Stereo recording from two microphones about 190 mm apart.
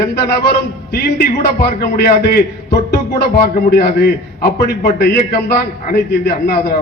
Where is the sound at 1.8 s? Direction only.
55° left (ahead or behind).